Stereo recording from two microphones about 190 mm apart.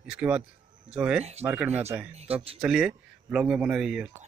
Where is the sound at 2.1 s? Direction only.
30° right (ahead or behind).